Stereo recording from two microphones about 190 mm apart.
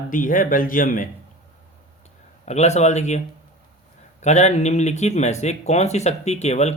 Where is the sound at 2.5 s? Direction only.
35° left (ahead or behind).